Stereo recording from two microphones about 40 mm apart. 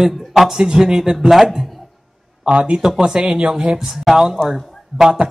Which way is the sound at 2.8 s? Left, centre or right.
Centre.